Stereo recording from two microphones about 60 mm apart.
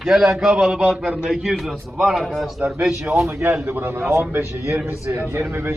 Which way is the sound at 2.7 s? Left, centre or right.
Centre.